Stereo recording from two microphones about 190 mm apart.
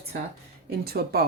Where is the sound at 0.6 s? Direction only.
55° right (ahead or behind).